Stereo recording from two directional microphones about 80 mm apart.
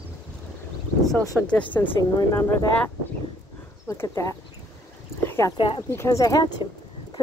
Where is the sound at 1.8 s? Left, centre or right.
Left.